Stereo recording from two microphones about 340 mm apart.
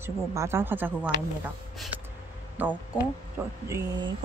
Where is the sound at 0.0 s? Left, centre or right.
Centre.